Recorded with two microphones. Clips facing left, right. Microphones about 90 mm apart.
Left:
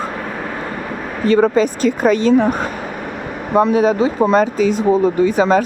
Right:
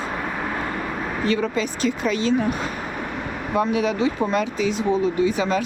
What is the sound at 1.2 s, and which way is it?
Speech, 45° left (ahead or behind).